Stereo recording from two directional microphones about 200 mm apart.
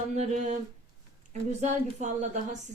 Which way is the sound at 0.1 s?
35° right (ahead or behind).